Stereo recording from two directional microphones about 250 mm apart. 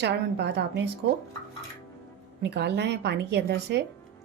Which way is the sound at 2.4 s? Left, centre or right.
Right.